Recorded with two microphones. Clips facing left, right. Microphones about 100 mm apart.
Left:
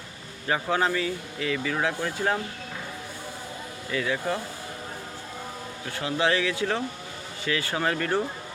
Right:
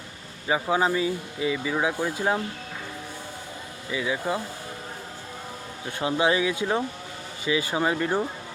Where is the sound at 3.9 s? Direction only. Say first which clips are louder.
Even; 15° right (ahead or behind).